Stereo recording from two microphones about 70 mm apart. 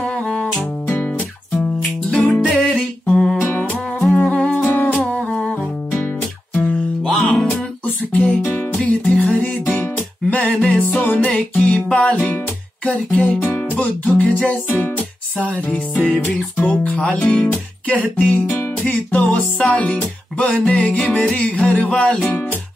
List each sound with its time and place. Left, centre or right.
0.0 s music: centre
1.5 s music: centre
2.5 s a sound: centre
3.4 s music: left
3.7 s music: centre
4.2 s music: centre
7.1 s music: centre
7.4 s music: centre
9.0 s music: centre